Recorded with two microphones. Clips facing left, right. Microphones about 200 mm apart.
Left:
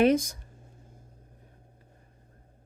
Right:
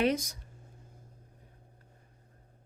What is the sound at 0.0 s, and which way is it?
Speech, 50° left (ahead or behind).